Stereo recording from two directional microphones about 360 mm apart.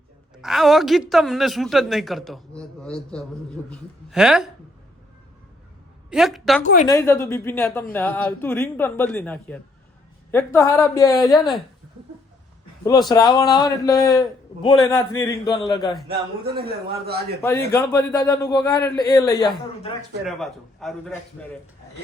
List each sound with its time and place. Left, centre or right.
0.4 s a woman's voice: centre
6.1 s a woman's voice: centre
12.8 s a man's voice: centre
16.0 s a man's voice: right
17.7 s a man's voice: centre
20.2 s a woman's voice: centre